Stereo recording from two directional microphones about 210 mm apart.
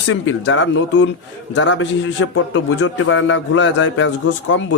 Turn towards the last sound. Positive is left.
turn(degrees=65)  # may be behind; listen again after turning